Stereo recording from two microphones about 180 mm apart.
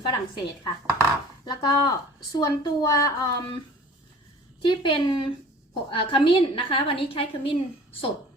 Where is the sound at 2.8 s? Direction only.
20° left (ahead or behind).